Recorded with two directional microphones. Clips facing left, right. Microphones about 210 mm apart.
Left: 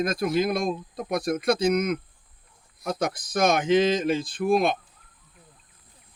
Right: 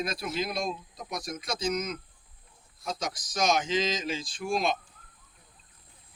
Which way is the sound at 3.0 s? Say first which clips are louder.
Left 6 dB; 60° left (ahead or behind).